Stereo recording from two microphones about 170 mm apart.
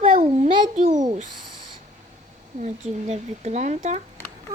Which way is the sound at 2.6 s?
45° right (ahead or behind).